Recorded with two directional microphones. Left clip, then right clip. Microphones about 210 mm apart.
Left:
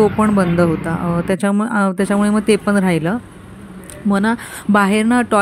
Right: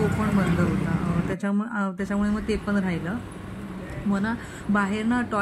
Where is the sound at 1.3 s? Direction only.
40° left (ahead or behind).